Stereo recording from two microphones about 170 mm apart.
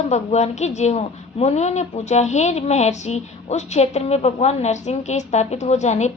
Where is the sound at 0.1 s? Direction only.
40° left (ahead or behind).